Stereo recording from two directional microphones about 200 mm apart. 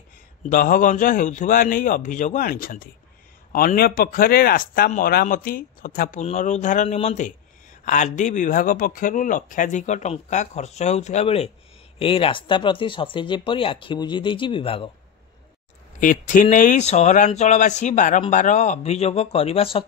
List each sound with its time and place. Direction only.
0.4 s speech: 45° left (ahead or behind); by 14.9 s 25° left (ahead or behind)
16.0 s speech: 40° left (ahead or behind)